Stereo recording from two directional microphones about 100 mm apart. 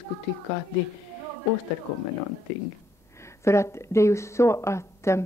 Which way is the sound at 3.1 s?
30° left (ahead or behind).